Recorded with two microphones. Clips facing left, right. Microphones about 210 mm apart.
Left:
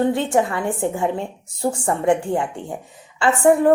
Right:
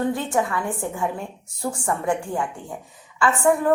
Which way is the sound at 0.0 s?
25° left (ahead or behind).